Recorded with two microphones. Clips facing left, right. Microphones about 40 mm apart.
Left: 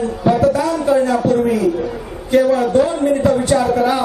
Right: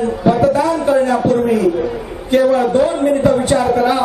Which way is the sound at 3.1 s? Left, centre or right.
Right.